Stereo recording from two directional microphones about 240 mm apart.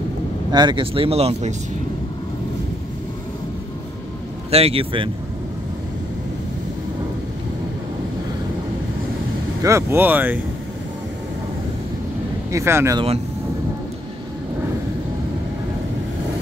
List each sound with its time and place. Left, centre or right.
0.5 s speech: centre
4.5 s speech: right
9.6 s speech: centre
12.4 s speech: centre